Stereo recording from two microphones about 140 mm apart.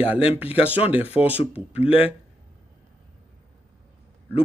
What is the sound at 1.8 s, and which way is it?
Speech, 40° left (ahead or behind).